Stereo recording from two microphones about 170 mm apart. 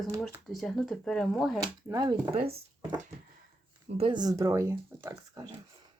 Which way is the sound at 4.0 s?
25° right (ahead or behind).